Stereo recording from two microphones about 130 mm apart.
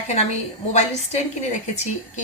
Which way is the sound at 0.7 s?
60° left (ahead or behind).